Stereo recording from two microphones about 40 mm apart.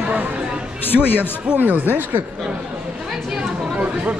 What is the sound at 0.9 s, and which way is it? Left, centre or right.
Speech, centre.